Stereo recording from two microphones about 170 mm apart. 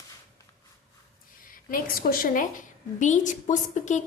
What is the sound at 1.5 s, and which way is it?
A woman's voice, 55° left (ahead or behind).